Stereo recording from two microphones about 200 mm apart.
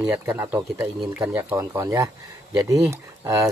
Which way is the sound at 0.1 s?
10° right (ahead or behind).